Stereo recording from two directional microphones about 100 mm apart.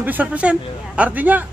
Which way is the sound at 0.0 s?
15° right (ahead or behind).